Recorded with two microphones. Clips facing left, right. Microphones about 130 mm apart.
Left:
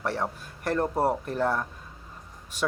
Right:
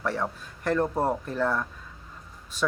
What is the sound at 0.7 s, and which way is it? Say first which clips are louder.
Speech: even; 10° left (ahead or behind).